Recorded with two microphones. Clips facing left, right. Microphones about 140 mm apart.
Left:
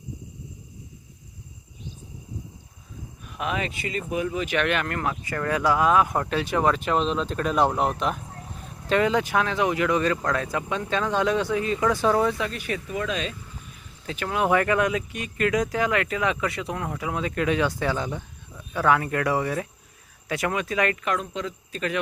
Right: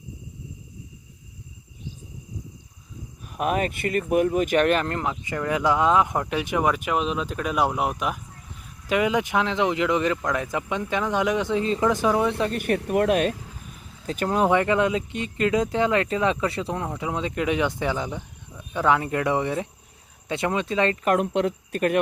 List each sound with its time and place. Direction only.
3.2 s speech: 45° right (ahead or behind)
4.9 s speech: 20° right (ahead or behind)
12.5 s speech: 55° right (ahead or behind)
14.1 s speech: 40° right (ahead or behind)
14.5 s speech: 20° right (ahead or behind)
21.0 s speech: 50° right (ahead or behind)
21.3 s speech: 60° right (ahead or behind)